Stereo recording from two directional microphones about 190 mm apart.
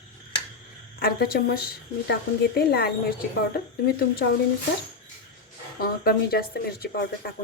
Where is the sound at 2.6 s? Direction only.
55° left (ahead or behind).